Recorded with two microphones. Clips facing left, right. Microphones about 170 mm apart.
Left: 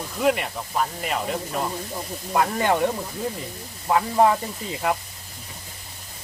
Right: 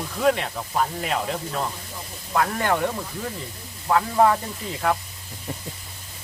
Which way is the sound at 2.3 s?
20° left (ahead or behind).